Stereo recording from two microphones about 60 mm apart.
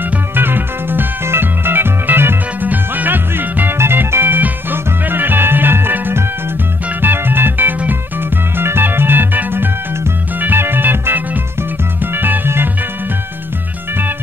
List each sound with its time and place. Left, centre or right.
0.4 s music: right